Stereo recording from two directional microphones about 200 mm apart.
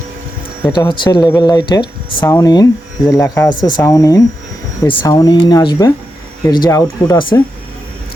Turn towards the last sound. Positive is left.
turn(degrees=20)  # may be behind; listen again after turning